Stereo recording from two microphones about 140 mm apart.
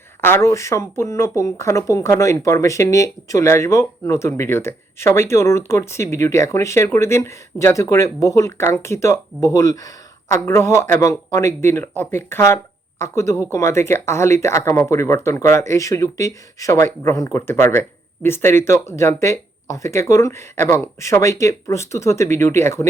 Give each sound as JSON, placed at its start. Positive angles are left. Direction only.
{"t": 0.2, "sound": "speech", "side_deg": 15}